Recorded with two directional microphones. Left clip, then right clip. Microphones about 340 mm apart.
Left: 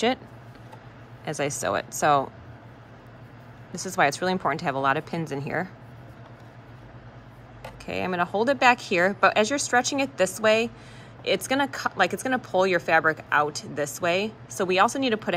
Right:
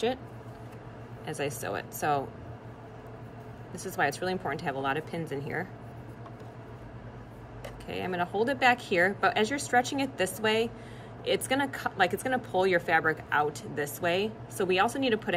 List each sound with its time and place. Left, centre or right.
1.2 s speech: centre
3.7 s speech: centre
7.8 s a woman's voice: centre